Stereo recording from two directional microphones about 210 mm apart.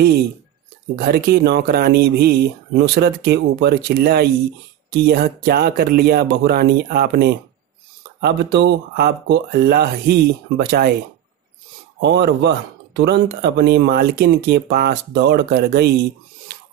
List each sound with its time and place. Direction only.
1.0 s speech: 50° right (ahead or behind)
12.0 s speech: 55° right (ahead or behind)